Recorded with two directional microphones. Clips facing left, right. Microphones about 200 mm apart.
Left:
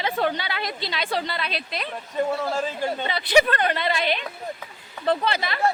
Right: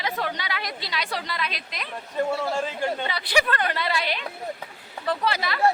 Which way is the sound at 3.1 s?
20° left (ahead or behind).